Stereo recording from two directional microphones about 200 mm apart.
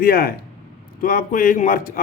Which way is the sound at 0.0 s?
50° left (ahead or behind).